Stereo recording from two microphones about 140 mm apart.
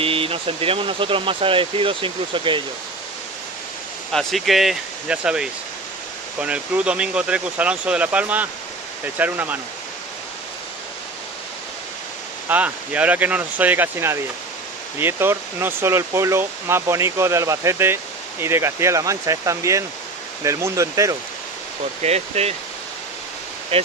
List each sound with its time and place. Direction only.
0.0 s speech: 40° right (ahead or behind)
4.1 s speech: centre (ahead or behind)
12.4 s speech: 10° right (ahead or behind)
22.0 s speech: 50° right (ahead or behind)
23.7 s speech: 45° right (ahead or behind)